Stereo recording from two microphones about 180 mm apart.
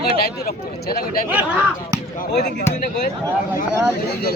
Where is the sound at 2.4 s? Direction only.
40° left (ahead or behind).